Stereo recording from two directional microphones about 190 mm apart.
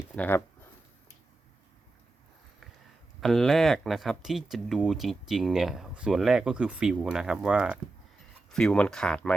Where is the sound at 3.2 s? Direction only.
Centre (ahead or behind).